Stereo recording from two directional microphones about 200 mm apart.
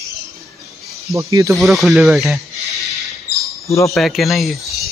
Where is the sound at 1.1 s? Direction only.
15° right (ahead or behind).